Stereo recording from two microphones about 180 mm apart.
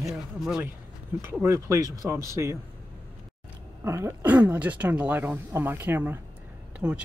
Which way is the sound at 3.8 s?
15° right (ahead or behind).